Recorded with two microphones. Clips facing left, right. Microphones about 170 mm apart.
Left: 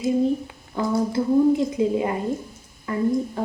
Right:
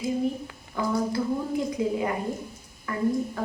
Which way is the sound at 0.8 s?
25° left (ahead or behind).